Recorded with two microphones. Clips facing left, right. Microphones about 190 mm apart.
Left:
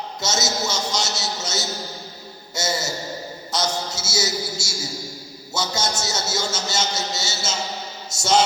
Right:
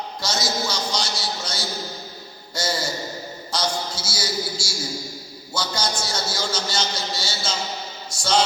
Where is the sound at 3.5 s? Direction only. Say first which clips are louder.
Left 1 dB; 25° left (ahead or behind).